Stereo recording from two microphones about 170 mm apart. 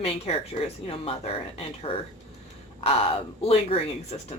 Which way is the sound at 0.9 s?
35° left (ahead or behind).